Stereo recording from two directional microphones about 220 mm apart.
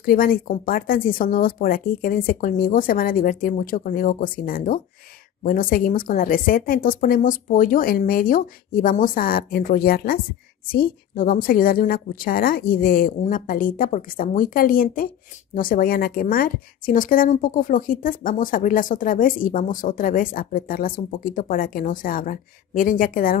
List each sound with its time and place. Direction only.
0.0 s a woman's voice: 40° left (ahead or behind)